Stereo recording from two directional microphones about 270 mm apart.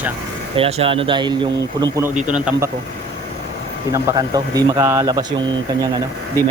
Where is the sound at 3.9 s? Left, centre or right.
Centre.